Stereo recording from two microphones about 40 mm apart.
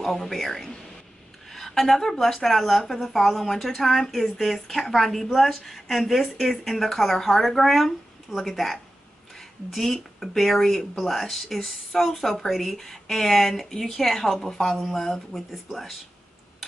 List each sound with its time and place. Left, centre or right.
0.0 s a woman's voice: centre